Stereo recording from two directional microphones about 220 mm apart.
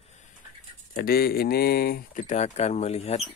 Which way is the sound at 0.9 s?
45° left (ahead or behind).